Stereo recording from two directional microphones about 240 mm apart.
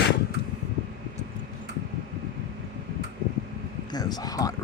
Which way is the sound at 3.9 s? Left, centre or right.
Centre.